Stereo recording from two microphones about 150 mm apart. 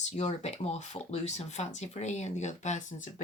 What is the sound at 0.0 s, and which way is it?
Speech, 50° left (ahead or behind).